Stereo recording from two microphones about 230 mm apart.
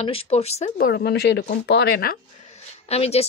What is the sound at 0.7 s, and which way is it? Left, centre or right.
Speech, left.